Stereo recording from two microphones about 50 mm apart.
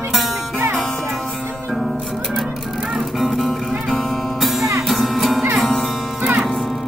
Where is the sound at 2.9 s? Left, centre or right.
Centre.